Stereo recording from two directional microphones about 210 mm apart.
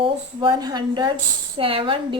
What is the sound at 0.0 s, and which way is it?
A woman's voice, 20° right (ahead or behind).